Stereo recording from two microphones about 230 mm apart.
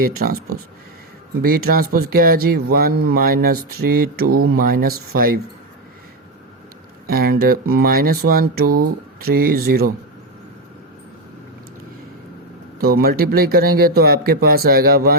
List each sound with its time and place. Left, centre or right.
0.0 s speech: right
1.4 s speech: right
7.1 s speech: right
8.6 s speech: right
9.2 s speech: right
12.8 s speech: right